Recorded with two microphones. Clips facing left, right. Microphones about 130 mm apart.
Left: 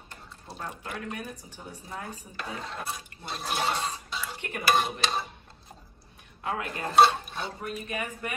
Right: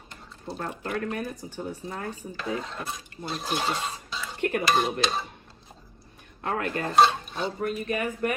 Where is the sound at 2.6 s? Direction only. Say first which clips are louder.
Right 1 dB; centre (ahead or behind).